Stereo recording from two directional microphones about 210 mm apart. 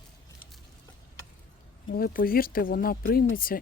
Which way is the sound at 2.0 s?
45° left (ahead or behind).